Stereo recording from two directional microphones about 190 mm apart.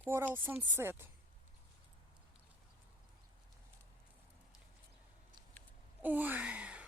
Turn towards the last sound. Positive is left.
turn(degrees=-5)  # may be behind; listen again after turning